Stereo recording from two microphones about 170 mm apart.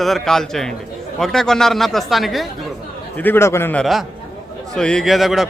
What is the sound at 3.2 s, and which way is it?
A man's voice, 15° left (ahead or behind).